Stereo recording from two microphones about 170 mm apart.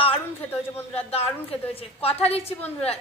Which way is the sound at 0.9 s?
35° left (ahead or behind).